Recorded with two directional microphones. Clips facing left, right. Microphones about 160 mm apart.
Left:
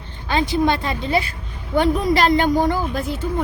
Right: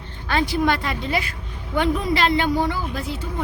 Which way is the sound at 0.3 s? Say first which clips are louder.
Left 2 dB; 20° left (ahead or behind).